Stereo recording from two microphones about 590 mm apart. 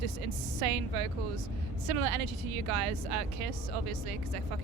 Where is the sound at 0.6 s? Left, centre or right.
Right.